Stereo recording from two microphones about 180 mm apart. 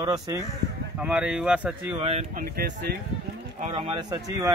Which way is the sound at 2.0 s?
35° right (ahead or behind).